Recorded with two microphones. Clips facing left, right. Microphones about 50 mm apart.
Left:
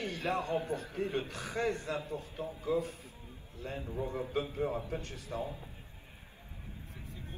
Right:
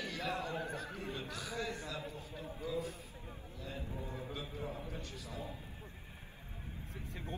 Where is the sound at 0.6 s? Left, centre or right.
Right.